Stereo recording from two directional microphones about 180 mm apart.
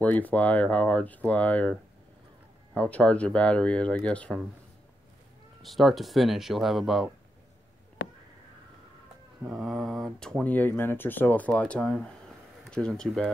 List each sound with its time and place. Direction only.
0.0 s speech: 10° left (ahead or behind)
5.6 s speech: centre (ahead or behind)
8.0 s a sound: 75° left (ahead or behind)
9.4 s speech: centre (ahead or behind)